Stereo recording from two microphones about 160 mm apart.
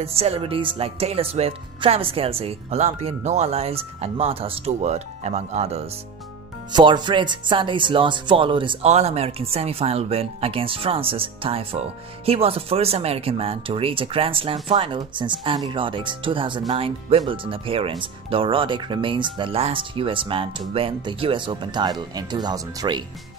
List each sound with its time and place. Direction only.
0.0 s speech: 40° right (ahead or behind)
6.7 s speech: 30° right (ahead or behind)